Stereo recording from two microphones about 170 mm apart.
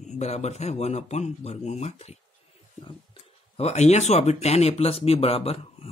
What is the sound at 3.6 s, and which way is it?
Speech, 40° left (ahead or behind).